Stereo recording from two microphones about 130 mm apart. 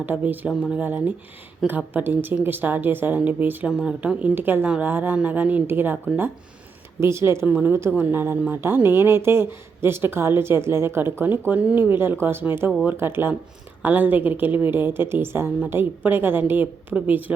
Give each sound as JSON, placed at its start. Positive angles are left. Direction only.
{"t": 0.0, "sound": "a woman's voice", "side_deg": -15}